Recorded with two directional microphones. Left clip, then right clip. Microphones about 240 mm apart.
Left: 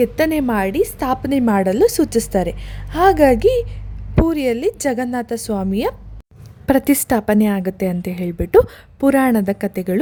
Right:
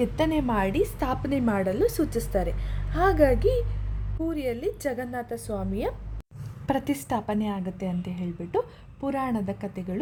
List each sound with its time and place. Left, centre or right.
0.0 s a woman's voice: left
6.7 s a woman's voice: left